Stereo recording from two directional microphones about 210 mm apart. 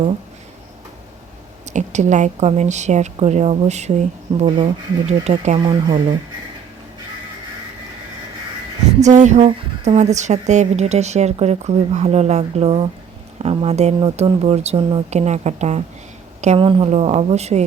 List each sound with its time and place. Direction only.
1.7 s a woman's voice: 35° right (ahead or behind)
9.0 s a woman's voice: 35° right (ahead or behind)